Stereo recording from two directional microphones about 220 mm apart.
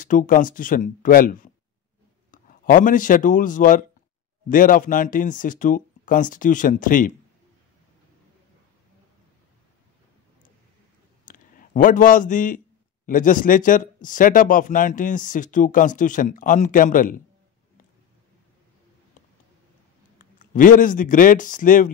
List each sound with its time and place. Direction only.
0.0 s a man's voice: 40° left (ahead or behind)
11.2 s a man's voice: 40° left (ahead or behind)
20.2 s speech: 40° left (ahead or behind)